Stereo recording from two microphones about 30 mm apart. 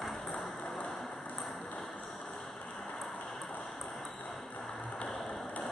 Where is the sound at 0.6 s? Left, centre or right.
Left.